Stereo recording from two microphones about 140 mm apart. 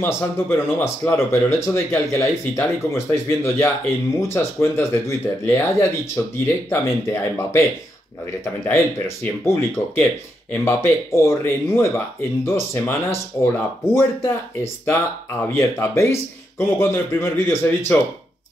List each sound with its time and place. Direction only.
0.0 s speech: 15° left (ahead or behind)
8.6 s speech: 15° left (ahead or behind)